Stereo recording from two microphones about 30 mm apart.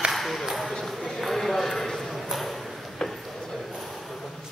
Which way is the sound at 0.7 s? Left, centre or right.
Centre.